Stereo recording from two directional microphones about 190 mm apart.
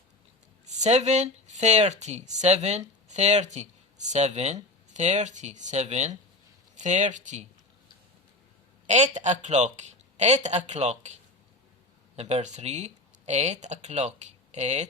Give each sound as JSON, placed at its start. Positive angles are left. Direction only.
{"t": 0.8, "sound": "speech", "side_deg": -35}
{"t": 8.9, "sound": "speech", "side_deg": -35}
{"t": 12.1, "sound": "speech", "side_deg": -35}